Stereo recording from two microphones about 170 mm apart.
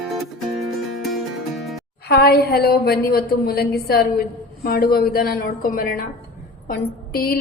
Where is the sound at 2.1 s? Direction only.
70° left (ahead or behind).